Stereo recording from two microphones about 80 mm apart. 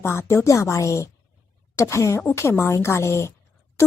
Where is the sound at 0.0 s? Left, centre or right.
Left.